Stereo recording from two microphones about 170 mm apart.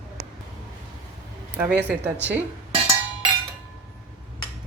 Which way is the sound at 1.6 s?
10° right (ahead or behind).